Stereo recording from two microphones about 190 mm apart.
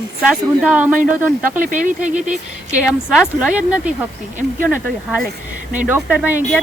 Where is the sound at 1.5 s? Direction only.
45° right (ahead or behind).